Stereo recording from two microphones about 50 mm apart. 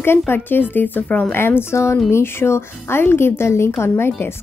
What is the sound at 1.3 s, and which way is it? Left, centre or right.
Speech, left.